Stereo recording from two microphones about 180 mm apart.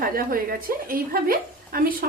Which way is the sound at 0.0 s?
50° right (ahead or behind).